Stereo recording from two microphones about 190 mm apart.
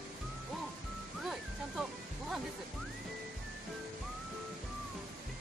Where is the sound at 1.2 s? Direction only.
Centre (ahead or behind).